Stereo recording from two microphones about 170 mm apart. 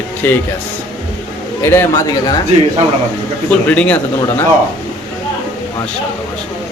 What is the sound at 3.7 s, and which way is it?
Speech, 10° left (ahead or behind).